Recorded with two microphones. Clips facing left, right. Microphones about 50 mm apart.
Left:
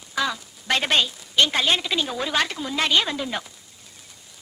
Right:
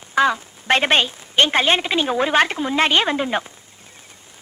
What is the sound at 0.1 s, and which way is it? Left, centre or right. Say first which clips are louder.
A man's voice: right 8 dB; right.